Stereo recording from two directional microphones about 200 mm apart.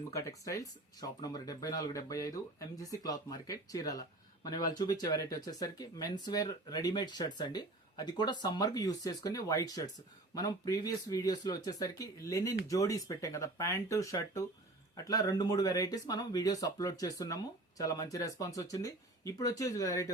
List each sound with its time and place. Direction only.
0.1 s speech: 15° left (ahead or behind)